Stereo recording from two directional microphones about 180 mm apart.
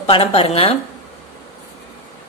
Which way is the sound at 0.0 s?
35° left (ahead or behind).